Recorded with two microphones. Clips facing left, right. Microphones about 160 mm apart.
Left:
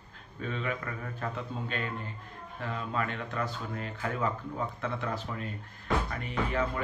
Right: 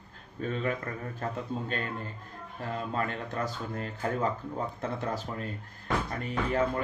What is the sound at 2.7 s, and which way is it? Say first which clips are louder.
Speech: right 2 dB; 40° right (ahead or behind).